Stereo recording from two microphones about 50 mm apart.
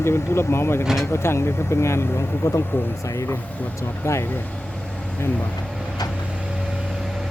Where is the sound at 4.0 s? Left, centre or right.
Left.